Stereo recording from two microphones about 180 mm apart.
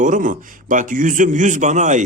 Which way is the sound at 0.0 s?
45° right (ahead or behind).